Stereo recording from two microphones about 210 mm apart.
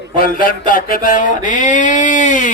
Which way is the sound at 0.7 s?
40° left (ahead or behind).